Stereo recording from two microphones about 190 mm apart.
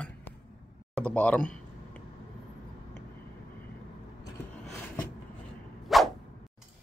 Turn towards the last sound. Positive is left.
turn(degrees=0)  # may be behind; listen again after turning